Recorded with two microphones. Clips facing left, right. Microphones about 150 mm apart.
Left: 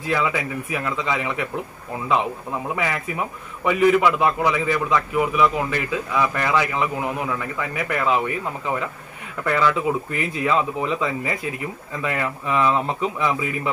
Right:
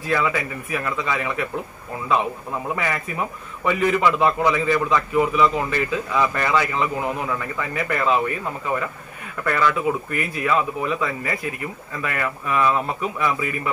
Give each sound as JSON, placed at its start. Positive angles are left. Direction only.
{"t": 0.0, "sound": "a man's voice", "side_deg": 15}
{"t": 2.7, "sound": "a man's voice", "side_deg": 10}
{"t": 9.4, "sound": "a man's voice", "side_deg": 10}
{"t": 10.1, "sound": "speech", "side_deg": 25}